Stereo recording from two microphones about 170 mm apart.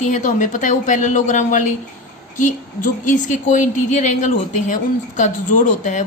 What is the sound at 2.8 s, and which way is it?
A woman's voice, 50° left (ahead or behind).